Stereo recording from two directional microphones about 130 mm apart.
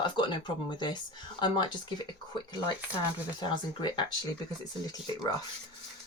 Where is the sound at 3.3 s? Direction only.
35° left (ahead or behind).